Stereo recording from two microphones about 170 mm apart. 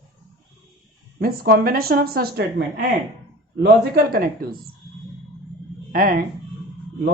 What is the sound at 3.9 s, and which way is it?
Speech, 60° right (ahead or behind).